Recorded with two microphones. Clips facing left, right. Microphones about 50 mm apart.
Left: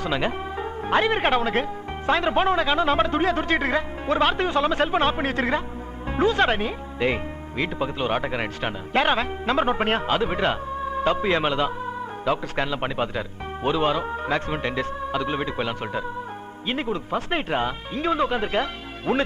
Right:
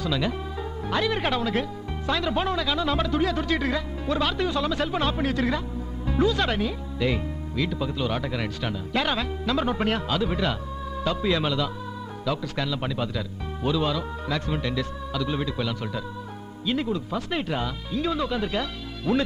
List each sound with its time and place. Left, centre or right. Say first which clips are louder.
0.0 s speech: left 2 dB; left